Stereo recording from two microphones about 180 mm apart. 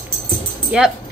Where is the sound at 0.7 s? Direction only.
5° right (ahead or behind).